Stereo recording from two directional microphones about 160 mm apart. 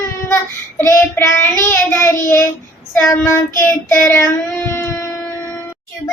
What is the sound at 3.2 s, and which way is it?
Child singing, 15° left (ahead or behind).